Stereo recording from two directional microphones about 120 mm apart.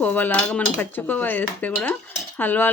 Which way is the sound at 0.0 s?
15° left (ahead or behind).